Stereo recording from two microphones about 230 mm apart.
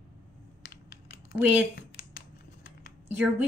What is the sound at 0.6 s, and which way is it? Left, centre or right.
Computer keyboard, left.